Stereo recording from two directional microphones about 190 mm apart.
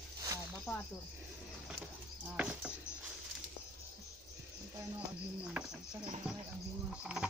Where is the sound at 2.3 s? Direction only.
5° right (ahead or behind).